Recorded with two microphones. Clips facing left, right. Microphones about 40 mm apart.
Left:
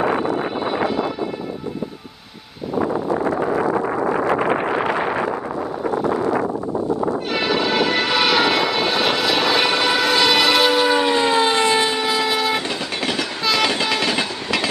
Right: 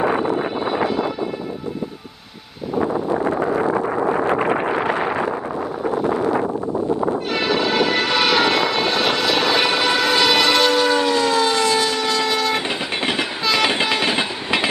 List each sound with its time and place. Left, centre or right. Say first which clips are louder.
0.4 s vehicle: even; centre
2.7 s a sound: even; centre
3.7 s wind noise: even; centre
7.3 s vehicle: even; centre; by 12.0 s left
12.0 s vehicle: even; centre
13.7 s train: right 1 dB; right